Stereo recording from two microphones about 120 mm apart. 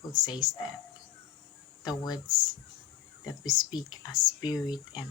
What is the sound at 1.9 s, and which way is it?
Speech, 35° left (ahead or behind).